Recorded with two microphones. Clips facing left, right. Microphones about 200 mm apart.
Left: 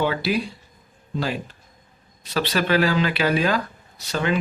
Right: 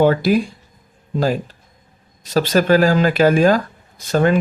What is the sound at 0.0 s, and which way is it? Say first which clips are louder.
Speech: right 8 dB; 45° right (ahead or behind).